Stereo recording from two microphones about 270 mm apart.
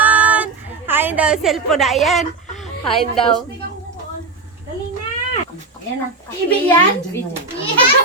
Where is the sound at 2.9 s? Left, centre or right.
Centre.